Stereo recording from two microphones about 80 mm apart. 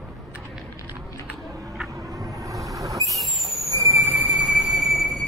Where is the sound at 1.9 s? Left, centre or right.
Right.